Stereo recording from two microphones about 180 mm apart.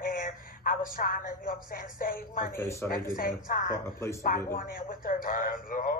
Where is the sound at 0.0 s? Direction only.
50° left (ahead or behind).